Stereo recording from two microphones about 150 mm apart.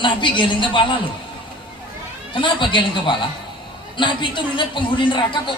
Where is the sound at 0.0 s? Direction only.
35° left (ahead or behind).